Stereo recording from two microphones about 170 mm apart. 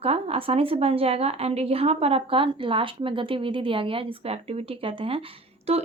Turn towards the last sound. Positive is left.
turn(degrees=-35)  # may be behind; listen again after turning